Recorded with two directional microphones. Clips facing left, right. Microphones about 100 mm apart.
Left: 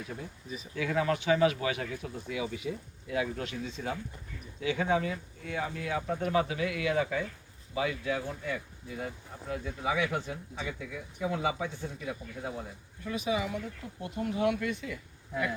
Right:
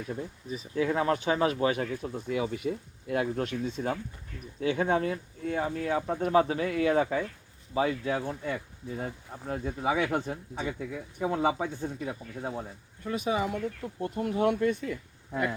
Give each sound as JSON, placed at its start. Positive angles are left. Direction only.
{"t": 0.5, "sound": "speech", "side_deg": -35}